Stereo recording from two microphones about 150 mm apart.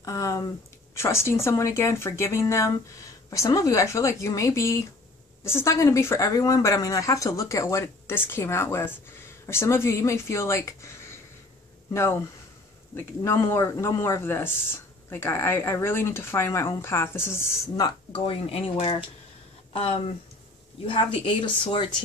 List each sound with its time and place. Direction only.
0.0 s speech: 20° left (ahead or behind)
11.9 s speech: 20° left (ahead or behind)
18.2 s speech: 40° left (ahead or behind)